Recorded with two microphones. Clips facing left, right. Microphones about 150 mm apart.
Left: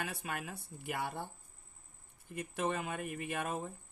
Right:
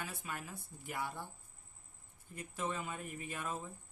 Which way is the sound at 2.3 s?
70° left (ahead or behind).